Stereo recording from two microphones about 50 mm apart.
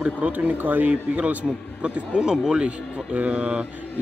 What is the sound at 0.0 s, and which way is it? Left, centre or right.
Speech, right.